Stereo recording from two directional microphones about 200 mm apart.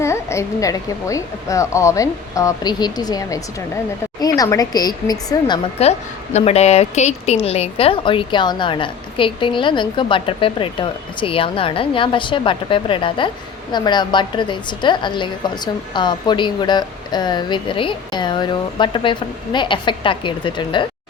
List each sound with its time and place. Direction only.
0.0 s a woman's voice: 15° left (ahead or behind)
5.8 s a woman's voice: 30° left (ahead or behind)